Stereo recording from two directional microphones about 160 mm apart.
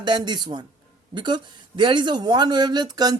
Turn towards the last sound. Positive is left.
turn(degrees=-25)  # may be behind; listen again after turning